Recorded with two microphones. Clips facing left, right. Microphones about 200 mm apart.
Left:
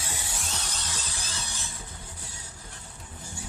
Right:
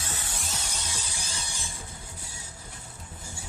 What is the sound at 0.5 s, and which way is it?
Music, 10° right (ahead or behind).